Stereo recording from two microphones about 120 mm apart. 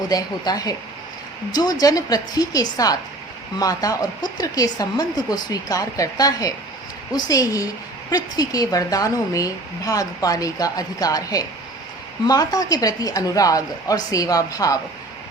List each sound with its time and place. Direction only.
0.1 s a woman's voice: 30° left (ahead or behind)